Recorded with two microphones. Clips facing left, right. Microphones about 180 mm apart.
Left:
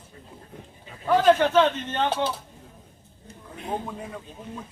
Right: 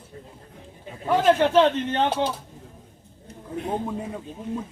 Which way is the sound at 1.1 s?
25° right (ahead or behind).